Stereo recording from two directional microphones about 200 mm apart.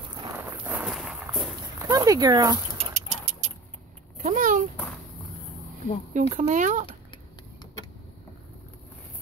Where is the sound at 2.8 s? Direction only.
35° right (ahead or behind).